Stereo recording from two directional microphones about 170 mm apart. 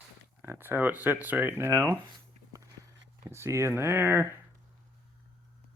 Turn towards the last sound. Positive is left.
turn(degrees=-10)  # may be behind; listen again after turning